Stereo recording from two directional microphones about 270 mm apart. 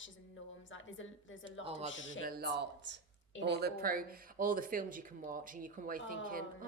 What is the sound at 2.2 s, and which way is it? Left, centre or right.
Speech, right.